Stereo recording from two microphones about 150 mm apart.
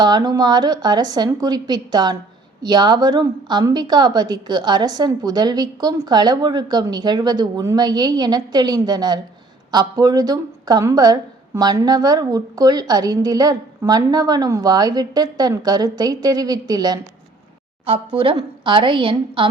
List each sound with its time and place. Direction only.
0.0 s a woman's voice: 25° right (ahead or behind)
17.8 s a woman's voice: 35° right (ahead or behind)